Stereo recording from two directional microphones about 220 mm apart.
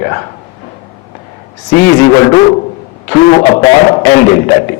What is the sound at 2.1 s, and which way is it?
A man's voice, 20° left (ahead or behind).